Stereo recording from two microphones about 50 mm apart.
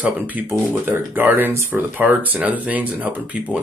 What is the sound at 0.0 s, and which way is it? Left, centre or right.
Speech, right.